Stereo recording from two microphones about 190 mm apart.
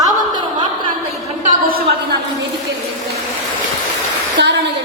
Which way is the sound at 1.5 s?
50° right (ahead or behind).